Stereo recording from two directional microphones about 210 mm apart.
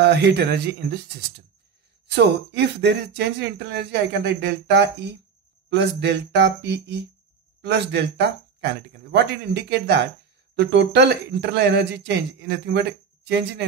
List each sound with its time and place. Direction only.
0.0 s speech: 50° right (ahead or behind)